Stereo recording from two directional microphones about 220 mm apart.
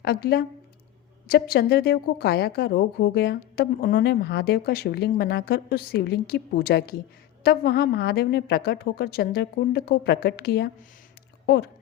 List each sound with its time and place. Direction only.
0.0 s a woman's voice: 45° left (ahead or behind)